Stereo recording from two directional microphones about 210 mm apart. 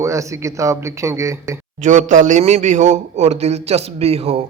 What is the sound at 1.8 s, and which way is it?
A man's voice, 35° right (ahead or behind).